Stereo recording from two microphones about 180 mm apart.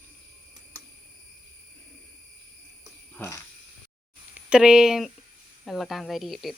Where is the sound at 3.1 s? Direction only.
15° left (ahead or behind).